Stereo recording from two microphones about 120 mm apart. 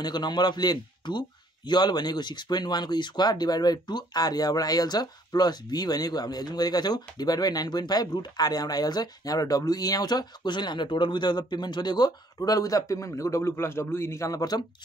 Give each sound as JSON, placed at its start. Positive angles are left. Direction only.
{"t": 0.0, "sound": "speech", "side_deg": 35}